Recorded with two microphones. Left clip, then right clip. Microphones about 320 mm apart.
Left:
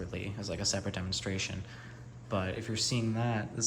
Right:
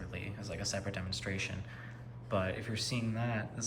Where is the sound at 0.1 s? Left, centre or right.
Centre.